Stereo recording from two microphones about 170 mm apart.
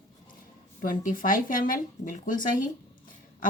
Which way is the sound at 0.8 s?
55° left (ahead or behind).